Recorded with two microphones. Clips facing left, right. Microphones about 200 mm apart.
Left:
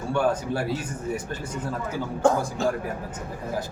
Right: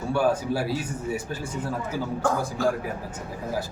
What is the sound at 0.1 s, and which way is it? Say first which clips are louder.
Speech: right 1 dB; 5° right (ahead or behind).